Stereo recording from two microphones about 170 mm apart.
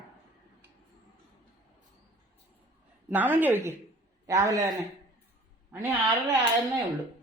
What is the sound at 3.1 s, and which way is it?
A woman's voice, 10° right (ahead or behind).